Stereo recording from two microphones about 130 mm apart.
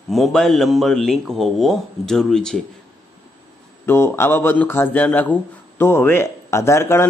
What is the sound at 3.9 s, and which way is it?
Speech, 20° left (ahead or behind).